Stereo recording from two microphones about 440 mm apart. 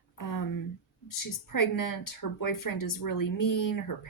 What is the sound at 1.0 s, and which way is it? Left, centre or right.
Speech, left.